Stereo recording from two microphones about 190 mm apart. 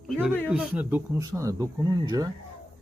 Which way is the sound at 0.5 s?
5° right (ahead or behind).